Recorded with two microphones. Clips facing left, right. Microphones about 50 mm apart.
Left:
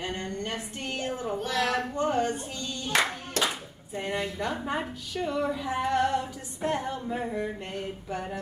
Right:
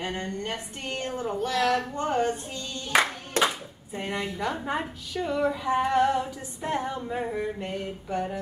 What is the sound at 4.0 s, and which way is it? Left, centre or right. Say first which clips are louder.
A woman's voice: even; centre.